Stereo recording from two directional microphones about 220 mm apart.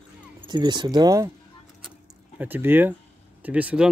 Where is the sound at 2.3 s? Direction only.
10° right (ahead or behind).